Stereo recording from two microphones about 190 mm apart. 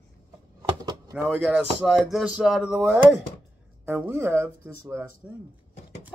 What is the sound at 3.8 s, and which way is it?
Speech, 10° right (ahead or behind).